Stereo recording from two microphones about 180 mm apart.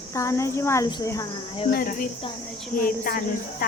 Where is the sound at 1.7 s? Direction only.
50° left (ahead or behind).